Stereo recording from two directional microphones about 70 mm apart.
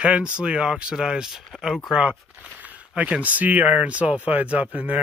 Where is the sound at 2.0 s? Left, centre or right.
Centre.